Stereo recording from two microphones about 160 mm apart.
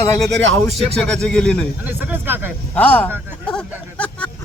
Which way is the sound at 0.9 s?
5° left (ahead or behind).